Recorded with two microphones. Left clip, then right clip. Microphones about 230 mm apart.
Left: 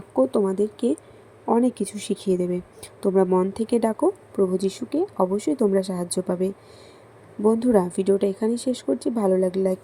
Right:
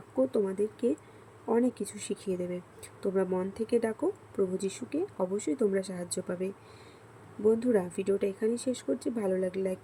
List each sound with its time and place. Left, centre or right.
0.2 s speech: centre